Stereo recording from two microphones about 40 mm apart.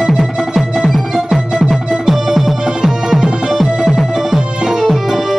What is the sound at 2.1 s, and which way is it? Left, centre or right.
Music, centre.